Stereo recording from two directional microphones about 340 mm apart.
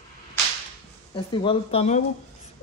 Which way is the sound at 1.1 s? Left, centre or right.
Centre.